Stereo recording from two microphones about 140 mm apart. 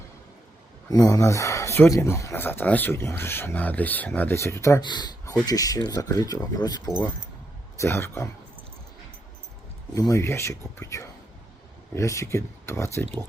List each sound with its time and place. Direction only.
0.9 s speech: 25° left (ahead or behind)
9.9 s speech: 25° left (ahead or behind)